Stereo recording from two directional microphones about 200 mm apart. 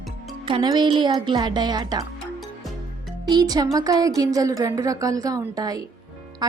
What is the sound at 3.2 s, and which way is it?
A woman's voice, 20° right (ahead or behind).